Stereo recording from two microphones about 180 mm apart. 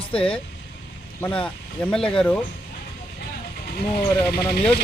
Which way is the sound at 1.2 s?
5° left (ahead or behind).